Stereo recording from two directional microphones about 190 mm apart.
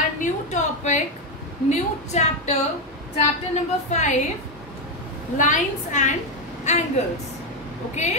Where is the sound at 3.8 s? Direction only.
40° left (ahead or behind).